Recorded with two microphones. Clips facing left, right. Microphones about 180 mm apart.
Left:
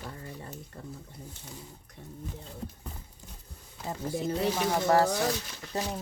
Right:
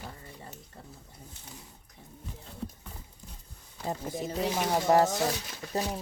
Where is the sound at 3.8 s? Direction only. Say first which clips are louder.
Left 2 dB; 20° right (ahead or behind).